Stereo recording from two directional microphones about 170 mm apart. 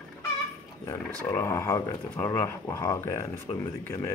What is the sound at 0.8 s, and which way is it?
Speech, 15° left (ahead or behind).